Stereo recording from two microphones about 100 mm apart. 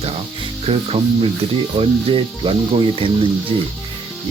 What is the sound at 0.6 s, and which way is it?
Speech, 90° right.